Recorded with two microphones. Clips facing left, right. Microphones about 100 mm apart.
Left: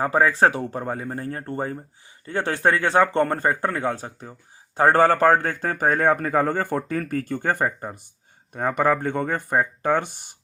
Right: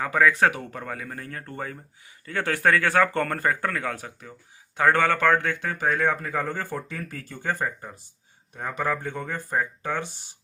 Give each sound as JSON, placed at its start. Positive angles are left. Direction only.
{"t": 0.0, "sound": "a man's voice", "side_deg": 30}